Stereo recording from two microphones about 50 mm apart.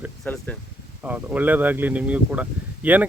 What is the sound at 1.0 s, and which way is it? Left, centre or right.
Speech, right.